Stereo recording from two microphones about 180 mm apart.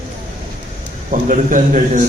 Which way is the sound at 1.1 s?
45° right (ahead or behind).